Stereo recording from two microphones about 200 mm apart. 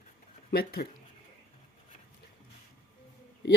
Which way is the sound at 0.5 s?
50° left (ahead or behind).